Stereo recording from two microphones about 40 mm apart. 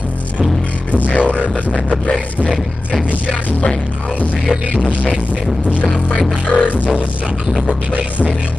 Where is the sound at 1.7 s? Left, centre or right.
Left.